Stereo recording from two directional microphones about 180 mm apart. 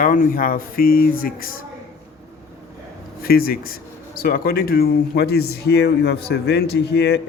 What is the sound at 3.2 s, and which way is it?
Speech, 55° left (ahead or behind).